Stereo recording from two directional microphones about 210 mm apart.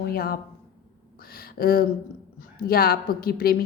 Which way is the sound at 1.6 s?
45° left (ahead or behind).